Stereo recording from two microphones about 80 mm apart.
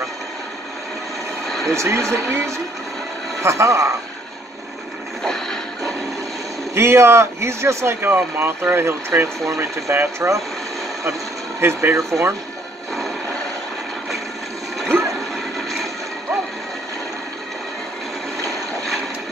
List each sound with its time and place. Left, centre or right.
1.7 s speech: right
5.2 s music: centre
6.7 s speech: right
11.6 s speech: right